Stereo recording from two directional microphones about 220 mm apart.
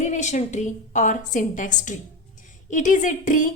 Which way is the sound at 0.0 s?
35° left (ahead or behind).